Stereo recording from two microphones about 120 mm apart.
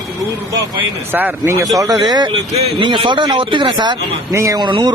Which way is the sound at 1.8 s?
35° right (ahead or behind).